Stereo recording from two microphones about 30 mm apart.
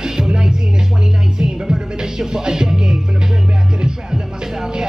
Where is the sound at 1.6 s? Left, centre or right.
Centre.